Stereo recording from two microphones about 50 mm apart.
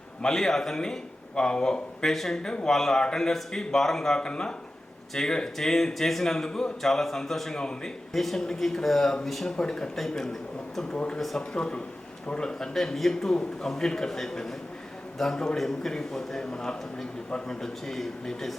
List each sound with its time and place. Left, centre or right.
0.2 s a man's voice: centre
2.4 s a man's voice: centre
8.1 s a man's voice: centre
10.9 s speech: left
11.2 s speech: centre
11.5 s a man's voice: centre